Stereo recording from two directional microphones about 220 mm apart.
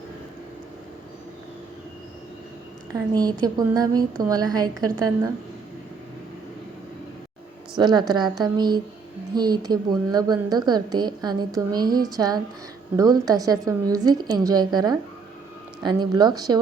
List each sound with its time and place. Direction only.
3.2 s a woman's voice: 15° right (ahead or behind)
7.8 s a woman's voice: 20° right (ahead or behind)